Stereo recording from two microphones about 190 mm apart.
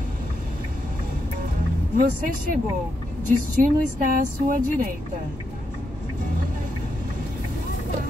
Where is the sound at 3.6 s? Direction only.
45° right (ahead or behind).